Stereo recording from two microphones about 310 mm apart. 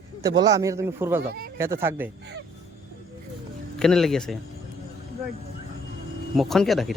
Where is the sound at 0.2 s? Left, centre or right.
Centre.